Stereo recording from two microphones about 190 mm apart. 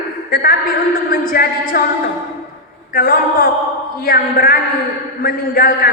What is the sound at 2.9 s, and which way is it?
A man's voice, 50° left (ahead or behind).